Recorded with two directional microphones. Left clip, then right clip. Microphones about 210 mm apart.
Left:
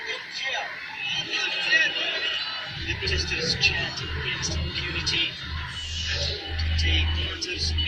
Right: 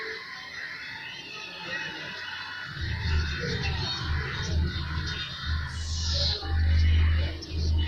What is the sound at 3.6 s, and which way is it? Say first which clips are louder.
Music: left 12 dB; 40° left (ahead or behind).